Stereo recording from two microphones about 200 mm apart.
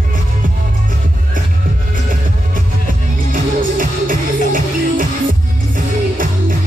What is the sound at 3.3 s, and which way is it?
Music, 45° right (ahead or behind).